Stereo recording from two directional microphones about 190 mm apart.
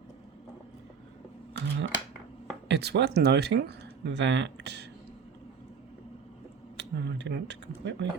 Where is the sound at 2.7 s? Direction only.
60° right (ahead or behind).